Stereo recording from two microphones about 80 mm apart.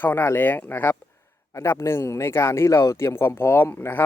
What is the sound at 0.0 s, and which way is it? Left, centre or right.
Speech, left.